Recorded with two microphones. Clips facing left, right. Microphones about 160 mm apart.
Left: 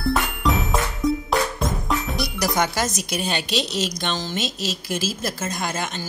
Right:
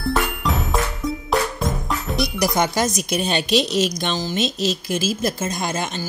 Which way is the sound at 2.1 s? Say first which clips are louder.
Right 6 dB; 15° right (ahead or behind).